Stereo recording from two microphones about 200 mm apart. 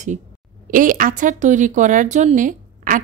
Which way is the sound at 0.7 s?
40° right (ahead or behind).